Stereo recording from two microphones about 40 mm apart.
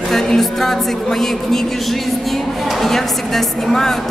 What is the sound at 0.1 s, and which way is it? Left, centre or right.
Speech, centre.